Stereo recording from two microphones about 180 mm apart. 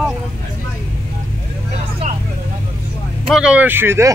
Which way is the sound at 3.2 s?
5° right (ahead or behind).